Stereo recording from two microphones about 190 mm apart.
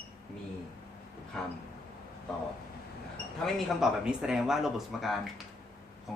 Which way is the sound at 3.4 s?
5° right (ahead or behind).